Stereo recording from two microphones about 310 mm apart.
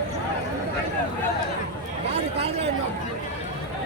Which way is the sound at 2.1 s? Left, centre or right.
Centre.